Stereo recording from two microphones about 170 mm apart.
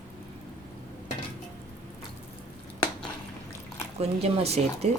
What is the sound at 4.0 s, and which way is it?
Speech, 35° right (ahead or behind).